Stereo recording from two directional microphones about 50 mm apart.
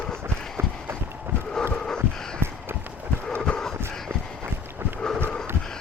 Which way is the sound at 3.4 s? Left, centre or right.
Centre.